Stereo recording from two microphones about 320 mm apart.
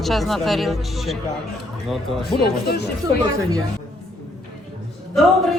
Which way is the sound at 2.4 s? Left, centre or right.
Left.